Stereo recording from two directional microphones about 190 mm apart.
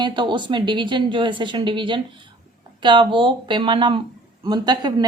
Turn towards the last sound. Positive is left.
turn(degrees=-20)  # may be behind; listen again after turning